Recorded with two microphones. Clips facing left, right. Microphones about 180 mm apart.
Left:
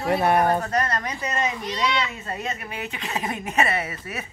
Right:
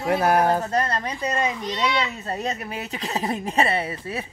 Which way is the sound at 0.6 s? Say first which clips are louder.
Right 1 dB; 30° right (ahead or behind).